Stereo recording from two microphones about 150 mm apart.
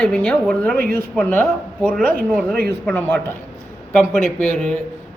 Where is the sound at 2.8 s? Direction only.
10° left (ahead or behind).